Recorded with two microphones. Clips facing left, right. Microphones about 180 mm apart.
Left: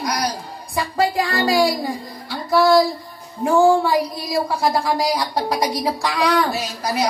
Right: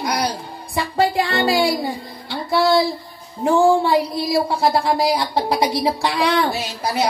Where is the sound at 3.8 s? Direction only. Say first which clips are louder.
Right 2 dB; 30° right (ahead or behind).